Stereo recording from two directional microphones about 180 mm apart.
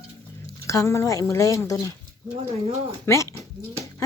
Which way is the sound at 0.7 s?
15° left (ahead or behind).